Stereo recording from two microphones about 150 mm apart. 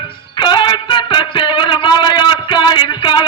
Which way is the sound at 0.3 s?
30° left (ahead or behind).